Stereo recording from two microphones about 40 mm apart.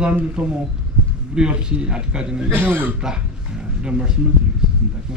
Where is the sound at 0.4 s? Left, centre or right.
Right.